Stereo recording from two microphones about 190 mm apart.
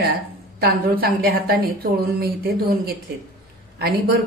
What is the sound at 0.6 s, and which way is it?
A woman's voice, 55° right (ahead or behind).